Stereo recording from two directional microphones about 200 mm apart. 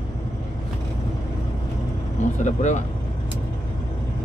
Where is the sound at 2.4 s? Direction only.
35° left (ahead or behind).